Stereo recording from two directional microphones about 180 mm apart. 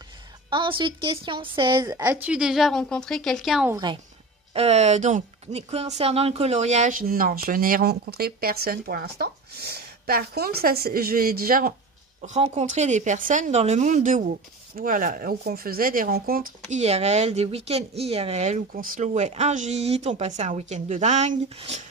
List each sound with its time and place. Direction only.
0.5 s a woman's voice: 25° right (ahead or behind); by 3.7 s centre (ahead or behind)
3.7 s speech: 25° right (ahead or behind)
4.6 s speech: 35° right (ahead or behind); by 11.7 s 55° right (ahead or behind)
12.2 s speech: 40° right (ahead or behind); by 16.4 s 55° right (ahead or behind)
16.7 s speech: 35° right (ahead or behind)